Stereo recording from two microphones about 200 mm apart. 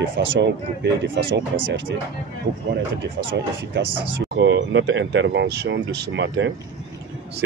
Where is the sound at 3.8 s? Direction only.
65° right (ahead or behind).